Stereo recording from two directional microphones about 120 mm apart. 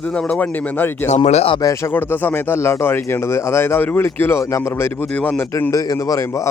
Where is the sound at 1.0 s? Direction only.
70° left (ahead or behind).